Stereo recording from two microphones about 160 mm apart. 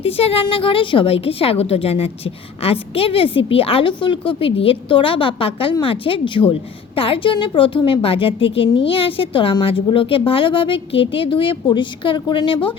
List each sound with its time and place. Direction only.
0.0 s a woman's voice: 35° left (ahead or behind)